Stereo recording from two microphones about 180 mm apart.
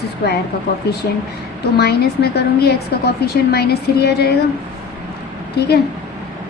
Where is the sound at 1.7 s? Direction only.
65° left (ahead or behind).